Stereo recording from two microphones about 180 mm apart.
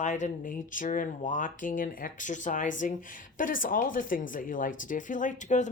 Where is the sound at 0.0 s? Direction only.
40° left (ahead or behind).